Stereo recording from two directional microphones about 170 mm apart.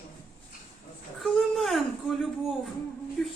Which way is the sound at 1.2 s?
Centre (ahead or behind).